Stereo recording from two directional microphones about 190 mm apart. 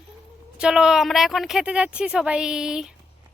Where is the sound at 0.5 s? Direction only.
5° right (ahead or behind).